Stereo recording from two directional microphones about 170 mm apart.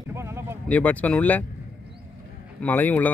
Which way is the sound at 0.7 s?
10° left (ahead or behind).